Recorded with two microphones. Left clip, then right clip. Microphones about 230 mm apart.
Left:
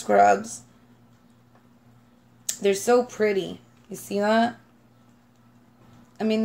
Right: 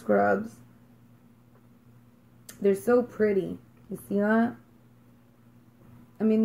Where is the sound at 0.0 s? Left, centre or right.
Left.